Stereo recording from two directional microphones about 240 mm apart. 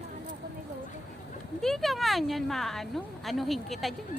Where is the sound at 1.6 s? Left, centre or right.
Centre.